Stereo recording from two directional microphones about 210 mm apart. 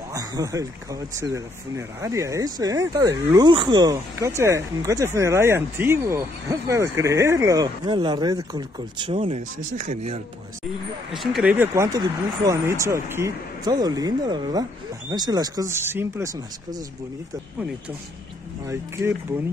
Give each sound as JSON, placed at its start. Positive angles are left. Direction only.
{"t": 0.1, "sound": "speech", "side_deg": -15}
{"t": 11.1, "sound": "speech", "side_deg": -5}
{"t": 18.7, "sound": "speech", "side_deg": -10}